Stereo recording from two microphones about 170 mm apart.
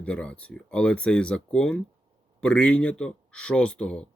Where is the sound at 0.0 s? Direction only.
5° left (ahead or behind).